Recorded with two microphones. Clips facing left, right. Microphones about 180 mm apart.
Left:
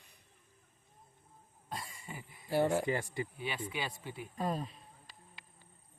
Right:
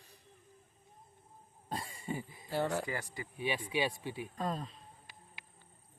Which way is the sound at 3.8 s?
20° right (ahead or behind).